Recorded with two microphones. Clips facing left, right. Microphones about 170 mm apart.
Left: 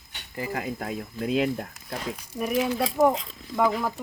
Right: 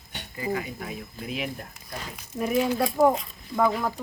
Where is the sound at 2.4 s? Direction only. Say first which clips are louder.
Right 1 dB; 5° left (ahead or behind).